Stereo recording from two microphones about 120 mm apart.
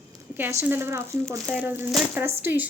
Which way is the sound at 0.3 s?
15° right (ahead or behind).